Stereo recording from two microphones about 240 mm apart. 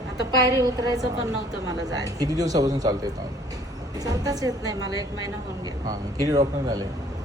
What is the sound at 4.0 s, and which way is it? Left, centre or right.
Speech, centre.